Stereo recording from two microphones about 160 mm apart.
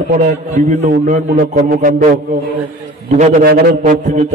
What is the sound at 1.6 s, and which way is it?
Speech, 75° right (ahead or behind).